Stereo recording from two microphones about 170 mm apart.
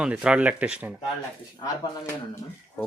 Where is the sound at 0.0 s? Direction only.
5° right (ahead or behind).